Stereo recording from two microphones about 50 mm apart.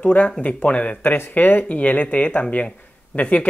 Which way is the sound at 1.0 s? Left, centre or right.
Left.